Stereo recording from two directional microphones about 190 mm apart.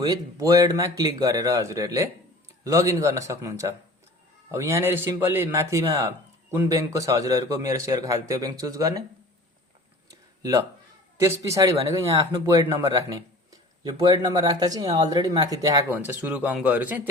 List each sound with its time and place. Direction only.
0.0 s a man's voice: 20° right (ahead or behind)
10.1 s a sound: 20° right (ahead or behind)
11.2 s a man's voice: 15° right (ahead or behind)